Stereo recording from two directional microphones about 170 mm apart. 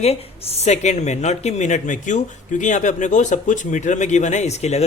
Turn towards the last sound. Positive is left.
turn(degrees=40)  # may be behind; listen again after turning